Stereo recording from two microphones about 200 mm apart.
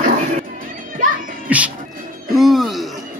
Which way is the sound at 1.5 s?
5° right (ahead or behind).